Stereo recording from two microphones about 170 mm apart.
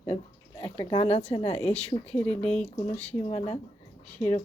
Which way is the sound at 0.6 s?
30° left (ahead or behind).